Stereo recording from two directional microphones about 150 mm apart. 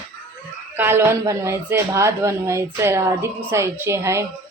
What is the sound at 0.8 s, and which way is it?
A woman's voice, 15° right (ahead or behind).